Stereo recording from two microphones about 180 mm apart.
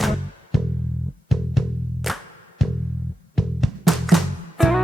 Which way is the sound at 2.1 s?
Centre (ahead or behind).